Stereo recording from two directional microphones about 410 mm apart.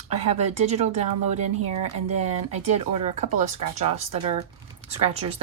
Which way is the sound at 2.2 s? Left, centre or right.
Centre.